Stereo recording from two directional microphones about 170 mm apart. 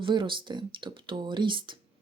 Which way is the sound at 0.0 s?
30° right (ahead or behind).